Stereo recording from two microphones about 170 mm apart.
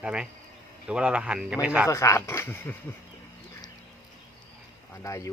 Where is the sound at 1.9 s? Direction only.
15° left (ahead or behind).